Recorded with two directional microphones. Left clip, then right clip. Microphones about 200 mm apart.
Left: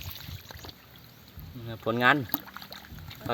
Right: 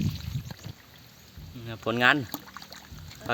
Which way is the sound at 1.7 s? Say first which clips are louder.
Right 1 dB; centre (ahead or behind).